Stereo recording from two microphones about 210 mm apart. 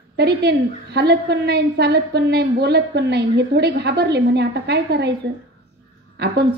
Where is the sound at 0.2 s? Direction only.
50° right (ahead or behind).